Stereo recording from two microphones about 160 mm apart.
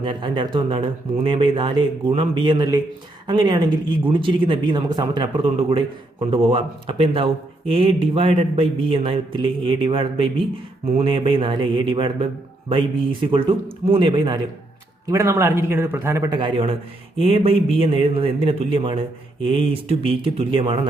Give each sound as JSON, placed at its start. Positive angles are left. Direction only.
{"t": 0.0, "sound": "speech", "side_deg": -30}
{"t": 15.1, "sound": "a man's voice", "side_deg": -15}
{"t": 16.3, "sound": "speech", "side_deg": -30}